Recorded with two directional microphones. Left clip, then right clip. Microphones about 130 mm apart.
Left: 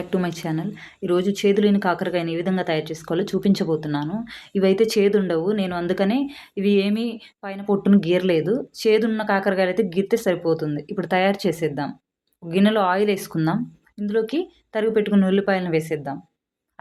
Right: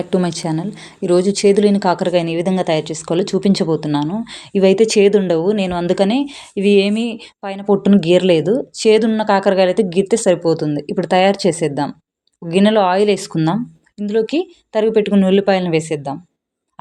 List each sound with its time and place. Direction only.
0.0 s a woman's voice: 35° right (ahead or behind)